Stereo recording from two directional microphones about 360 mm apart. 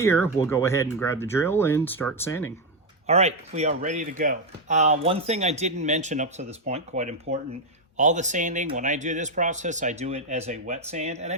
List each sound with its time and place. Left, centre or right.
0.0 s speech: centre
3.1 s speech: centre